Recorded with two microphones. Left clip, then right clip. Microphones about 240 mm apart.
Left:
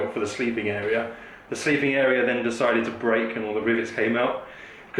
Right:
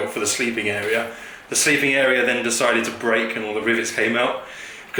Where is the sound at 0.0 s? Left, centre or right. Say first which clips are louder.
Right 4 dB; centre.